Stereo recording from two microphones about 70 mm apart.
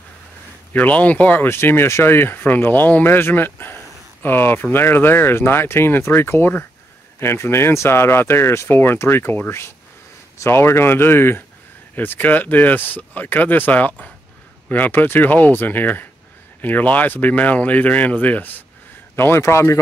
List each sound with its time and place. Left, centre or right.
0.7 s speech: left
19.1 s speech: left